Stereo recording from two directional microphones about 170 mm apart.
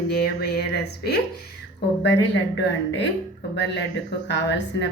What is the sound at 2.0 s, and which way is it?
A woman's voice, 90° left.